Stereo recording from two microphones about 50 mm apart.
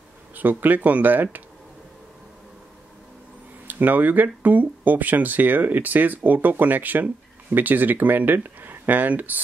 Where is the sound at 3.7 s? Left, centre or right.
Right.